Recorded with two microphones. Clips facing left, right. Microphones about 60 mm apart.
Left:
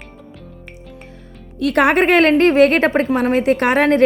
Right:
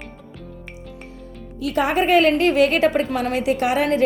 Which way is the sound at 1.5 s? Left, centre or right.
Left.